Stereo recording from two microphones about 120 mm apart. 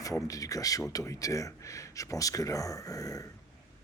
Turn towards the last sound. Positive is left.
turn(degrees=30)  # may be behind; listen again after turning